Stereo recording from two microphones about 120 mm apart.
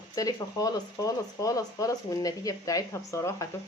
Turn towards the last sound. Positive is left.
turn(degrees=25)  # may be behind; listen again after turning